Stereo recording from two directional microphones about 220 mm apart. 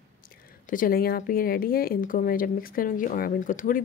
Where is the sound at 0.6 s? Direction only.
40° left (ahead or behind).